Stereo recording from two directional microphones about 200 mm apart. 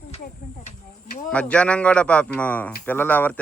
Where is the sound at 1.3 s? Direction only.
5° left (ahead or behind).